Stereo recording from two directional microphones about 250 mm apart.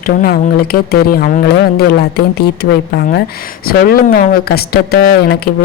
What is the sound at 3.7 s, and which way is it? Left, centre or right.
Speech, left.